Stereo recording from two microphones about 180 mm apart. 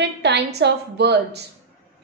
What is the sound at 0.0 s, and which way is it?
A woman's voice, 70° right (ahead or behind).